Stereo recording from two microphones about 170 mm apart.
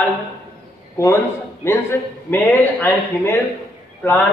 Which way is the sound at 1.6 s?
15° left (ahead or behind).